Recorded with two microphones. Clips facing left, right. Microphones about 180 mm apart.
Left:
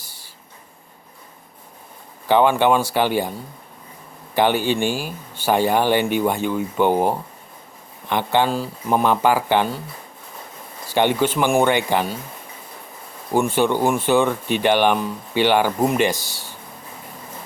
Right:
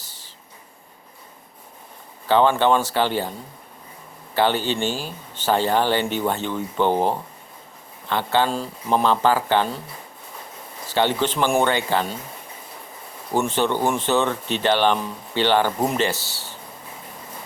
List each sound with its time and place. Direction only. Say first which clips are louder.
0.0 s a sound: left 1 dB; 10° left (ahead or behind)
2.2 s speech: left 1 dB; 15° left (ahead or behind)
4.4 s speech: left 3 dB; 15° left (ahead or behind)
8.4 s speech: left 2 dB; centre (ahead or behind)
9.0 s speech: left 1 dB; 15° left (ahead or behind)
10.8 s speech: left 3 dB; 15° left (ahead or behind)
13.3 s speech: left 3 dB; 10° left (ahead or behind)